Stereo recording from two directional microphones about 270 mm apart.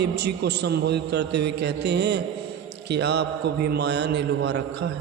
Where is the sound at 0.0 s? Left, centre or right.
Right.